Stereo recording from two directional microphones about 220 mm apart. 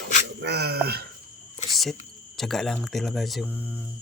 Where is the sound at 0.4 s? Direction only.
45° right (ahead or behind).